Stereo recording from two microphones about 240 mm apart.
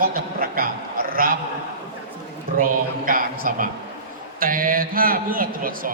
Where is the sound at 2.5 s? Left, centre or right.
Right.